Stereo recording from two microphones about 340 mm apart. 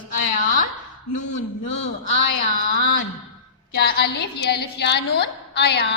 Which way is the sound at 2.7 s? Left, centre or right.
Left.